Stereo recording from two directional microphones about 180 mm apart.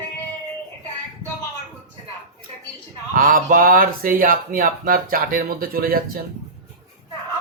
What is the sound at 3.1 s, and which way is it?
Speech, 50° right (ahead or behind).